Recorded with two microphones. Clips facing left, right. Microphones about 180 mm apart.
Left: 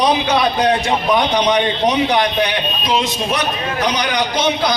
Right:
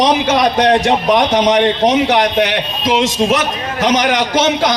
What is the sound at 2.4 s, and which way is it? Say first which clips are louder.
A man's voice: right 3 dB; 90° right.